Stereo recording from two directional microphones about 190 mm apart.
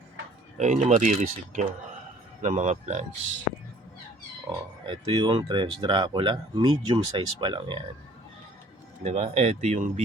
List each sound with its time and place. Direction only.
0.5 s speech: 40° right (ahead or behind)
4.9 s speech: 25° right (ahead or behind)
9.0 s speech: 35° right (ahead or behind)